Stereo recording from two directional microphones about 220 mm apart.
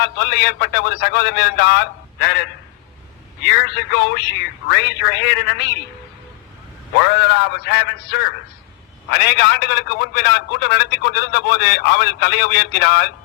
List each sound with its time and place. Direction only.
0.0 s a man's voice: 50° left (ahead or behind)
7.0 s a man's voice: 45° left (ahead or behind)